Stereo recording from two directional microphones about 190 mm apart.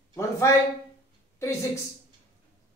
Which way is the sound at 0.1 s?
15° left (ahead or behind).